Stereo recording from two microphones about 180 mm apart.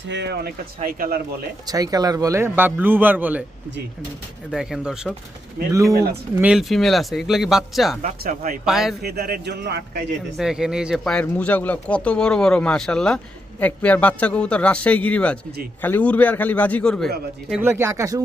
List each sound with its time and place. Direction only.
0.1 s speech: 65° right (ahead or behind)
0.8 s speech: 50° right (ahead or behind)
1.6 s a man's voice: 20° right (ahead or behind)
4.5 s speech: 5° right (ahead or behind)
5.6 s speech: 50° right (ahead or behind)
6.3 s speech: 5° right (ahead or behind)
8.2 s speech: 50° right (ahead or behind)
8.6 s speech: centre (ahead or behind)
9.0 s a man's voice: 60° right (ahead or behind)
10.3 s a man's voice: 5° right (ahead or behind)
17.6 s a man's voice: 15° right (ahead or behind)